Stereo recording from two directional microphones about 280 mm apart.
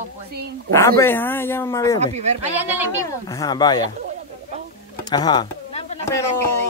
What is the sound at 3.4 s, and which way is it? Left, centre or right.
Speech, centre.